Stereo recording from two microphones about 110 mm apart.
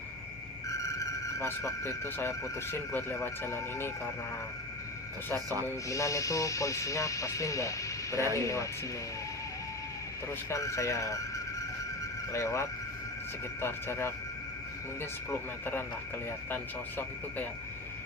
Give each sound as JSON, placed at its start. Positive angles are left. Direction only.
{"t": 0.7, "sound": "a sound", "side_deg": 30}
{"t": 2.7, "sound": "speech", "side_deg": 20}
{"t": 5.6, "sound": "speech", "side_deg": 30}
{"t": 10.5, "sound": "speech", "side_deg": 30}
{"t": 12.3, "sound": "speech", "side_deg": 25}
{"t": 15.3, "sound": "speech", "side_deg": 20}
{"t": 17.0, "sound": "speech", "side_deg": 15}